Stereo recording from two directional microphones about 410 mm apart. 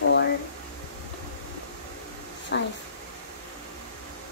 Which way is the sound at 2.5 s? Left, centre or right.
Left.